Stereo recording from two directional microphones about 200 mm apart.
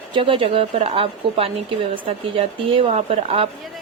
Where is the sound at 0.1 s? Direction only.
25° right (ahead or behind).